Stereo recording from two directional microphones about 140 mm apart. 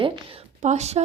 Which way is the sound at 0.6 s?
55° right (ahead or behind).